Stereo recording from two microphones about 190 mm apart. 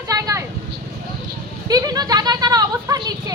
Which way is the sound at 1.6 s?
20° right (ahead or behind).